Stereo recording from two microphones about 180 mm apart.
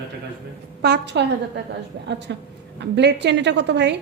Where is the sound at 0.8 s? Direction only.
70° right (ahead or behind).